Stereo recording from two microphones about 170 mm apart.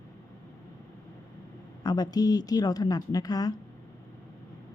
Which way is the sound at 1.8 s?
25° left (ahead or behind).